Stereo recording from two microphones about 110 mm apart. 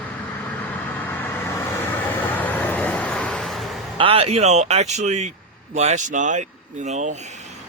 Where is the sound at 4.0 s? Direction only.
60° right (ahead or behind); by 7.1 s 90° right.